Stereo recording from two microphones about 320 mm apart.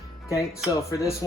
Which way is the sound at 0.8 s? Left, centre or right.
Centre.